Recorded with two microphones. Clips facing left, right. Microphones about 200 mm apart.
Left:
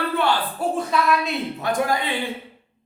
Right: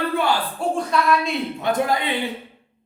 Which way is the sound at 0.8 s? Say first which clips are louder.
Right 1 dB; centre (ahead or behind).